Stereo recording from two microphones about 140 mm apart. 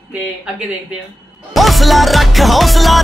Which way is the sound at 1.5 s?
Centre (ahead or behind).